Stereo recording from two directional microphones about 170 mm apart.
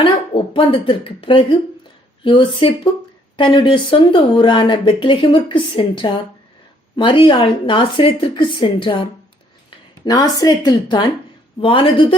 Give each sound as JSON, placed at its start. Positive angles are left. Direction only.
{"t": 0.0, "sound": "speech", "side_deg": 30}